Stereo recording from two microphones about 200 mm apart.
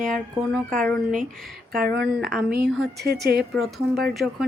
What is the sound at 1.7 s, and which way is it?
Speech, 50° right (ahead or behind).